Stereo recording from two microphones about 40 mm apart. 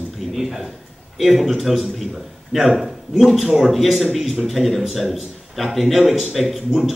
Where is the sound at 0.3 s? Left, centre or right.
Centre.